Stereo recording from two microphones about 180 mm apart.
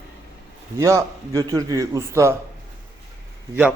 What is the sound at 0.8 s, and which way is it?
Speech, 15° right (ahead or behind).